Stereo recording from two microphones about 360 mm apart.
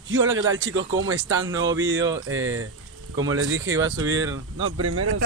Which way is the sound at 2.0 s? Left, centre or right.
Centre.